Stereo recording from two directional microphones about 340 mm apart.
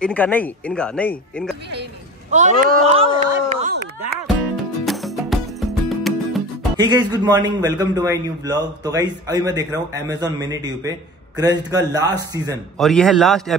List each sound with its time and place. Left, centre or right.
0.0 s speech: centre
2.3 s speech: right
4.8 s music: centre
6.8 s a man's voice: centre
12.7 s speech: centre